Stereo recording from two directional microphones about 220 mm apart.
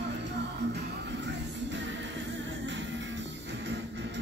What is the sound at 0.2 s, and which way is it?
Music, 50° right (ahead or behind).